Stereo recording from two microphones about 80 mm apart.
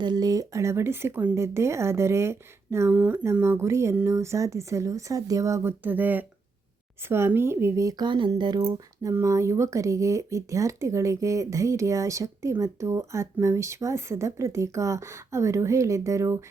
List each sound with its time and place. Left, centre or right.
0.0 s speech: right
2.9 s speech: centre
3.4 s speech: right
5.6 s speech: right
8.0 s speech: right
8.4 s speech: right
9.2 s speech: right